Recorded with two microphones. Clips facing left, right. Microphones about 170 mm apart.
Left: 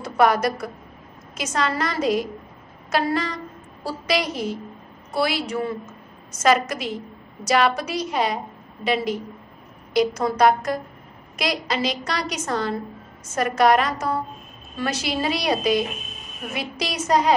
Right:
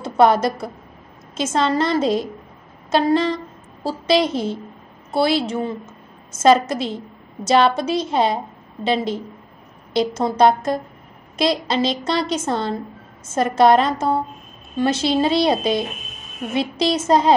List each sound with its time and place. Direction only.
0.0 s a woman's voice: 25° right (ahead or behind)